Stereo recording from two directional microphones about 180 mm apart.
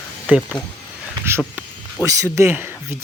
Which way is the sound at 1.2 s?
15° right (ahead or behind).